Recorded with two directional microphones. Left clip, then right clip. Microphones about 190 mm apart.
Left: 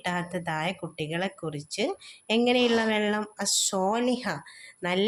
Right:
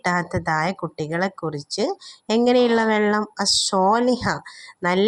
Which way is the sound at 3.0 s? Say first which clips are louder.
Right 8 dB; 30° right (ahead or behind).